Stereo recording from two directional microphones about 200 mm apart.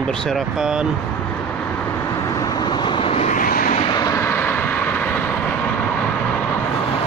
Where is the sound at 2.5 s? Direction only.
20° left (ahead or behind); by 3.8 s 40° left (ahead or behind).